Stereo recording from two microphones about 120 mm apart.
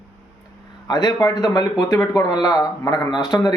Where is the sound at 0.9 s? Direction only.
30° left (ahead or behind).